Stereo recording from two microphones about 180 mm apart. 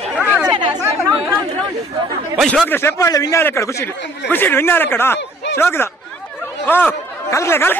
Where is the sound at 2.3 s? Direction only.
Centre (ahead or behind).